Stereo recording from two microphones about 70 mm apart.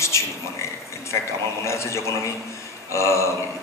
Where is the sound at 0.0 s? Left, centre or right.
Left.